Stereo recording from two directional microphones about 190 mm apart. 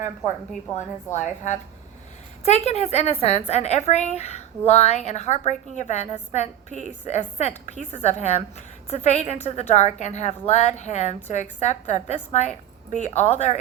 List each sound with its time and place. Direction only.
1.1 s a woman's voice: 40° left (ahead or behind)
2.6 s a woman's voice: 35° left (ahead or behind)